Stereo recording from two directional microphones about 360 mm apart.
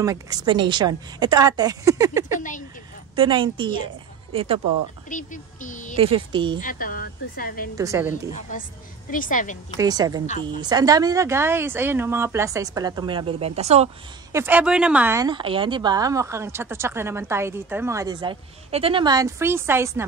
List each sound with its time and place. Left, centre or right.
0.0 s a woman's voice: centre
5.1 s speech: left
5.9 s a woman's voice: centre
6.6 s speech: left
7.7 s a woman's voice: centre
8.4 s speech: left
9.8 s a woman's voice: centre
14.3 s a woman's voice: centre